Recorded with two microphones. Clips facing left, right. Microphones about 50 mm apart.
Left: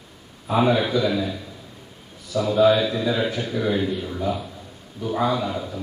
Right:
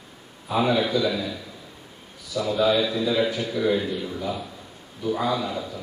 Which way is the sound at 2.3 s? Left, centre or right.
Left.